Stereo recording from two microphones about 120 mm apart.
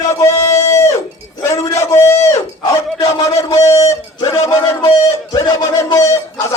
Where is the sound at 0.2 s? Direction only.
25° left (ahead or behind).